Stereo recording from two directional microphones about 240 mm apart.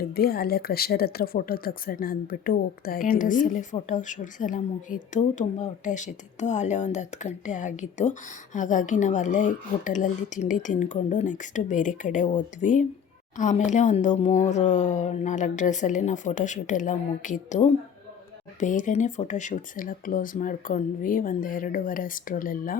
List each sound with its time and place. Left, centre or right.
0.1 s a woman's voice: left